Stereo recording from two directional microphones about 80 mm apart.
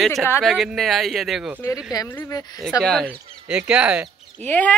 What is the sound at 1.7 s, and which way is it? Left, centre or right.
Speech, left.